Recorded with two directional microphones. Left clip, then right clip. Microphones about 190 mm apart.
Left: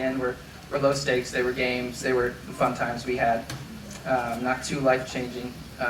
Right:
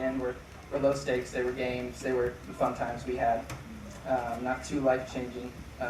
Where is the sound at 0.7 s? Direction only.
35° left (ahead or behind).